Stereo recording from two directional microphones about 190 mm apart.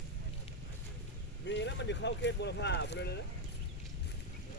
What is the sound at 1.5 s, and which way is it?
Speech, 70° left (ahead or behind).